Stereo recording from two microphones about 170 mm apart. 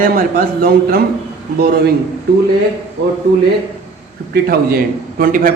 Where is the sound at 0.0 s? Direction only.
55° right (ahead or behind).